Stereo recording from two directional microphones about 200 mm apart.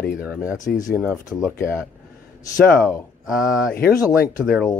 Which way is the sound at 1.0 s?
Centre (ahead or behind).